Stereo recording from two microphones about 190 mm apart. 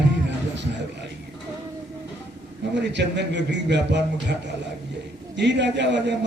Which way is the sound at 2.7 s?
65° right (ahead or behind).